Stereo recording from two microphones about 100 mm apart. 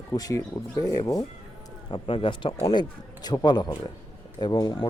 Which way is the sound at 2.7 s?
45° left (ahead or behind).